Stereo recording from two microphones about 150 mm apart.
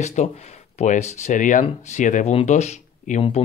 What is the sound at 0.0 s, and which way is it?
Speech, 50° left (ahead or behind).